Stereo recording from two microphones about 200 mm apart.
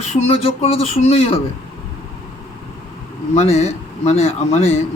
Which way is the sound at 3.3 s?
30° left (ahead or behind).